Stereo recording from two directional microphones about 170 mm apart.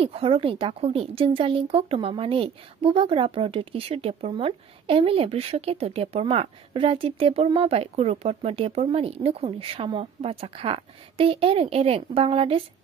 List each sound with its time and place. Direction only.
0.0 s speech: 35° right (ahead or behind)